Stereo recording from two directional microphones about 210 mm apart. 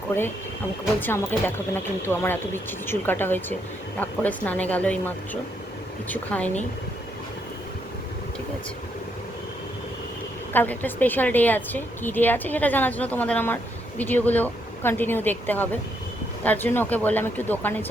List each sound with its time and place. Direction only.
0.9 s a woman's voice: 10° left (ahead or behind)
10.5 s a woman's voice: 10° left (ahead or behind)